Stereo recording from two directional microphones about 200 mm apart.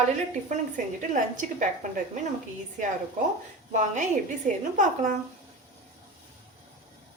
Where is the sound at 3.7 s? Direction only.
40° right (ahead or behind).